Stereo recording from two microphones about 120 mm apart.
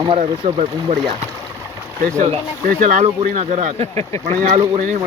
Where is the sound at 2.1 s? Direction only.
55° right (ahead or behind).